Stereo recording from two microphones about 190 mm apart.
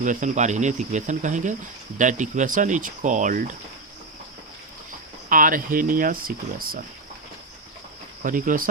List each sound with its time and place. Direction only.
0.0 s speech: 40° right (ahead or behind)
5.3 s speech: 45° right (ahead or behind)
8.2 s speech: 45° right (ahead or behind)